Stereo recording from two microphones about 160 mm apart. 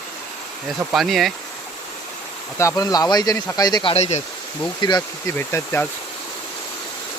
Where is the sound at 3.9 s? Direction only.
45° left (ahead or behind).